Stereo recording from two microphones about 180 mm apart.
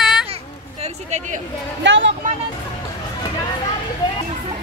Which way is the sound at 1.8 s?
90° right.